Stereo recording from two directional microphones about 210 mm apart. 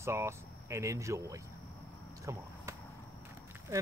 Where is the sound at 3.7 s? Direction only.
10° right (ahead or behind).